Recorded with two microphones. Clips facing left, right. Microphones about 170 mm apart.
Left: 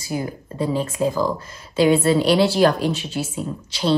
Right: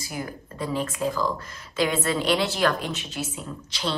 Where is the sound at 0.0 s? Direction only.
25° left (ahead or behind).